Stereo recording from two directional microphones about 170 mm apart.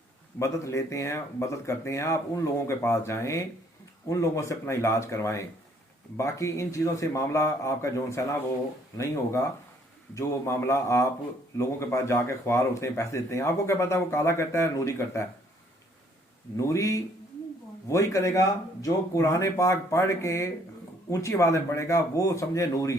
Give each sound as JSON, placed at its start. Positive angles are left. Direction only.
{"t": 0.3, "sound": "speech", "side_deg": 20}
{"t": 16.6, "sound": "a man's voice", "side_deg": 20}